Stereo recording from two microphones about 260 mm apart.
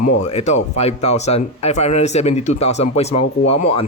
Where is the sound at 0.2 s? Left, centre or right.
Left.